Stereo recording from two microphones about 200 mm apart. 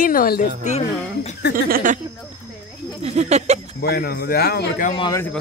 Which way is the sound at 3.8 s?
50° left (ahead or behind).